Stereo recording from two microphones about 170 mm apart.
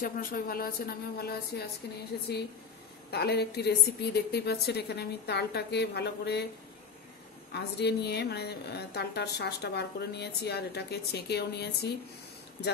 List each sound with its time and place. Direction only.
0.0 s a woman's voice: 55° left (ahead or behind); by 6.4 s 75° left (ahead or behind)
7.5 s a woman's voice: 75° left (ahead or behind)